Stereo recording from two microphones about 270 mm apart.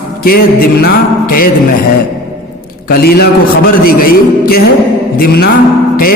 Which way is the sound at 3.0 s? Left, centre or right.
Left.